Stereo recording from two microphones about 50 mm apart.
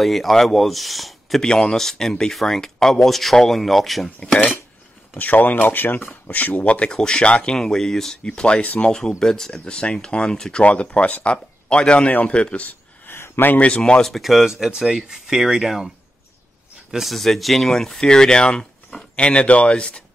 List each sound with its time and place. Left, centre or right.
0.0 s speech: centre
1.4 s speech: centre
5.1 s speech: left; by 8.2 s centre
8.2 s speech: left
9.2 s speech: centre
10.6 s speech: left
12.1 s speech: left
12.4 s speech: left
13.1 s a sound: left
13.6 s speech: left
14.0 s speech: centre
16.9 s speech: centre; by 20.0 s left